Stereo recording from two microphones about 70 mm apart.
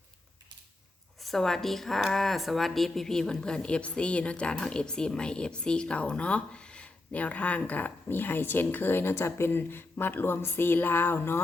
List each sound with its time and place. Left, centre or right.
1.2 s a woman's voice: centre; by 11.3 s left